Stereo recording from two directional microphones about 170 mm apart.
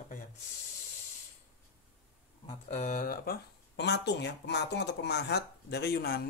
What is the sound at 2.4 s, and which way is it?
Speech, 45° left (ahead or behind).